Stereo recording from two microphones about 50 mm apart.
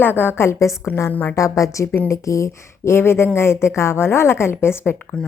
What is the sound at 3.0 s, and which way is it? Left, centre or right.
A woman's voice, left.